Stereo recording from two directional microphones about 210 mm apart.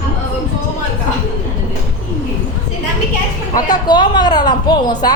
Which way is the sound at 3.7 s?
20° left (ahead or behind).